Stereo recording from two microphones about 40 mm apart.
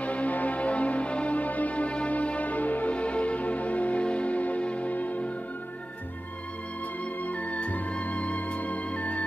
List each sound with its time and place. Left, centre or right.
0.0 s music: left
7.2 s music: left